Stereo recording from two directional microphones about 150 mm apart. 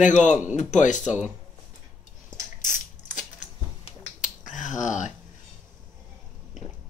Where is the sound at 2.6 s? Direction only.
55° left (ahead or behind).